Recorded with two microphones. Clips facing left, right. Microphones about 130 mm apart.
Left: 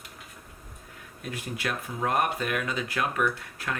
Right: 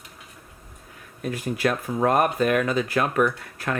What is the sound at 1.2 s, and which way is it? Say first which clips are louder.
Speech: right 9 dB; 45° right (ahead or behind).